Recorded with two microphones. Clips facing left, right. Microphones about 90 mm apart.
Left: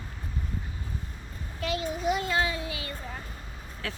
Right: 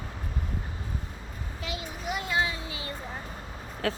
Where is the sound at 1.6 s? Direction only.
15° right (ahead or behind).